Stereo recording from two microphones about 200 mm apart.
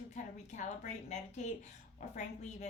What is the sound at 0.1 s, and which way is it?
A woman's voice, 35° left (ahead or behind).